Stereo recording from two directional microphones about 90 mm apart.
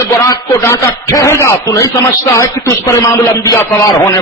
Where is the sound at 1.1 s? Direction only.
35° left (ahead or behind).